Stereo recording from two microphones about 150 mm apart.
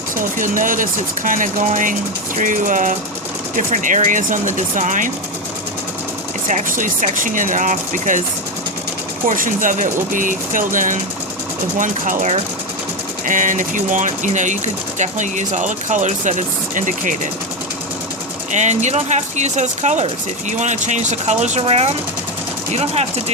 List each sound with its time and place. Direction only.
0.3 s speech: 60° right (ahead or behind)
6.5 s speech: 60° right (ahead or behind)
9.2 s speech: 65° right (ahead or behind)
18.5 s speech: 50° right (ahead or behind)